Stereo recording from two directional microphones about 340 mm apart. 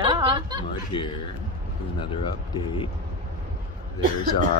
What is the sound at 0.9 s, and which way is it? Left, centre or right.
Speech, centre.